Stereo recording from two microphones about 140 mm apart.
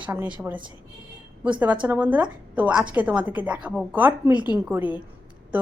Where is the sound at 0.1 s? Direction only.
10° right (ahead or behind).